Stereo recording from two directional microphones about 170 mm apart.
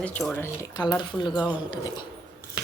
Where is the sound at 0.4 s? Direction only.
20° left (ahead or behind).